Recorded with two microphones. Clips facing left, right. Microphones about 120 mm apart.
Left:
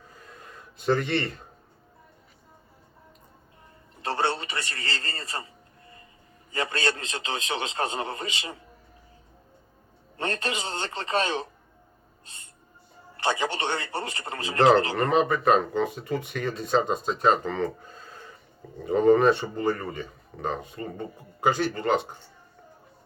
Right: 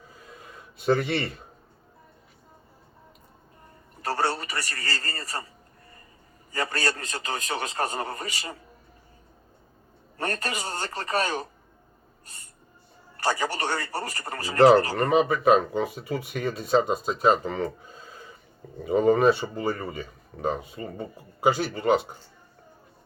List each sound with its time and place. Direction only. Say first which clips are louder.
0.2 s a sound: right 1 dB; 5° right (ahead or behind)
4.0 s a sound: even; 25° left (ahead or behind)
6.5 s a man's voice: even; 25° left (ahead or behind)
10.2 s a man's voice: left 1 dB; 25° left (ahead or behind)
12.2 s music: even; 25° left (ahead or behind)
13.1 s a man's voice: even; 25° left (ahead or behind)
14.9 s speech: right 1 dB; 5° right (ahead or behind)